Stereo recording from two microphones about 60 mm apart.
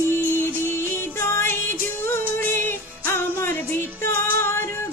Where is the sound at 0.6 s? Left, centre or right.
Left.